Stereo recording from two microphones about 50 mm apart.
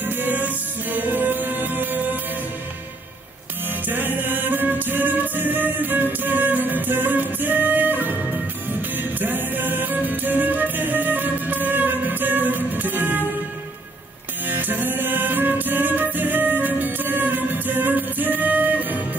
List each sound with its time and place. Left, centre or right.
0.0 s music: right
3.8 s music: right
14.5 s music: right